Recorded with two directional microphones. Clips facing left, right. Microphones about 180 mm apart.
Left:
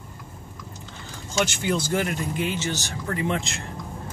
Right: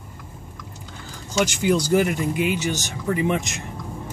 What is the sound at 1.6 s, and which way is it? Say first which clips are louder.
Speech: right 6 dB; 10° right (ahead or behind).